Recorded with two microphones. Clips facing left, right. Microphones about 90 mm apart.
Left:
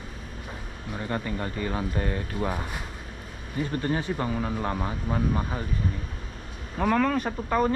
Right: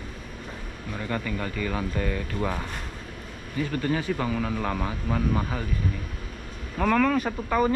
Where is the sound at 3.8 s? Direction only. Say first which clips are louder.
Right 1 dB; 25° left (ahead or behind).